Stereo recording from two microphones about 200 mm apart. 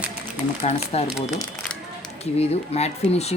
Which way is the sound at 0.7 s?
35° left (ahead or behind).